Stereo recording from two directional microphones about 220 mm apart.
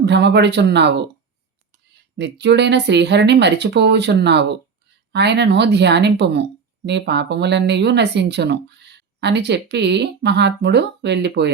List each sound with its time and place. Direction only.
0.0 s speech: 50° right (ahead or behind)
2.1 s speech: 50° right (ahead or behind)